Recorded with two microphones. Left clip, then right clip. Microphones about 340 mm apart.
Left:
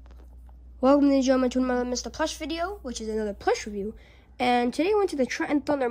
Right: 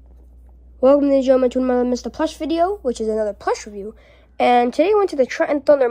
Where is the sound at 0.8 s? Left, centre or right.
Centre.